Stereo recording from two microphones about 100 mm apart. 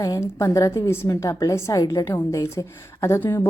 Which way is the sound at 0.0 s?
35° left (ahead or behind).